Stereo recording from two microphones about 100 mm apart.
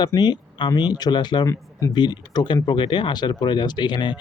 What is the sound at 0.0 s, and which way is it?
Speech, 45° left (ahead or behind).